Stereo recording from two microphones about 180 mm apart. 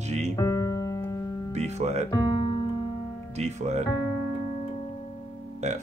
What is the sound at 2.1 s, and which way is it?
Music, 20° left (ahead or behind).